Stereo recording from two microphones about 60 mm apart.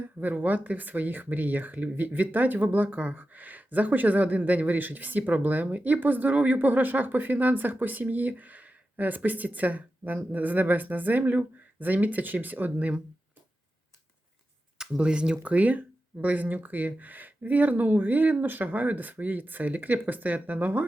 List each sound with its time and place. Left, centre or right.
0.0 s speech: right
12.7 s speech: centre
14.8 s speech: centre